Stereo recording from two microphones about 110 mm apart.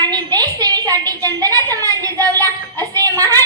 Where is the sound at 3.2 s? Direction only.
30° right (ahead or behind).